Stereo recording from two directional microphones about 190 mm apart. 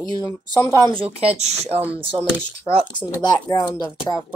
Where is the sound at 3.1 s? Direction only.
20° left (ahead or behind).